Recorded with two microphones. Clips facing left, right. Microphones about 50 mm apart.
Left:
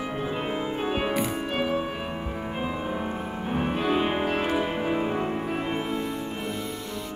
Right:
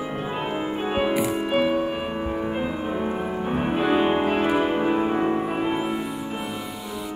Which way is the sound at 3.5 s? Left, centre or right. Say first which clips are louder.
Right 3 dB; centre.